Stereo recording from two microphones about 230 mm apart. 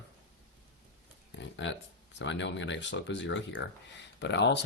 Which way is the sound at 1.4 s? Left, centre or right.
Left.